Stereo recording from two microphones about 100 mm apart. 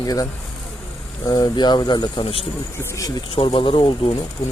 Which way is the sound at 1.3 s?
40° left (ahead or behind).